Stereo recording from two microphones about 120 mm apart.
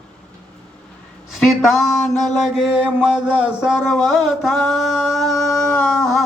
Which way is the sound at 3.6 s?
5° right (ahead or behind).